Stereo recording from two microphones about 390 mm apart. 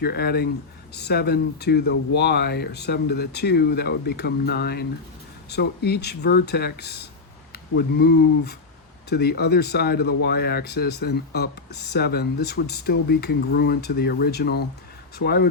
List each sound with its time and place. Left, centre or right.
0.0 s speech: left